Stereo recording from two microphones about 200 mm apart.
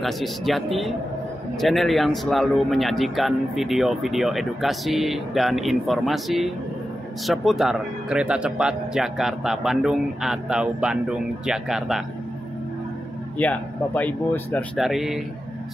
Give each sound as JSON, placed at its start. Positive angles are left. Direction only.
{"t": 0.0, "sound": "speech", "side_deg": 0}
{"t": 13.4, "sound": "speech", "side_deg": 5}